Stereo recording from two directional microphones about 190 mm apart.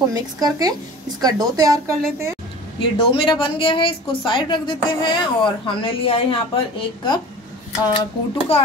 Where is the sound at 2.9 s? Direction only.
30° left (ahead or behind).